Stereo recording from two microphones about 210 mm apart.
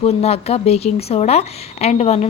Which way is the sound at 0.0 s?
30° left (ahead or behind).